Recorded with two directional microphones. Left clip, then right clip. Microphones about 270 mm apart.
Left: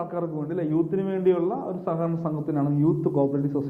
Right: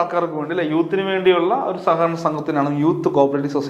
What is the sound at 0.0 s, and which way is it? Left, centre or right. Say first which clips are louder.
A man's voice: right 10 dB; centre.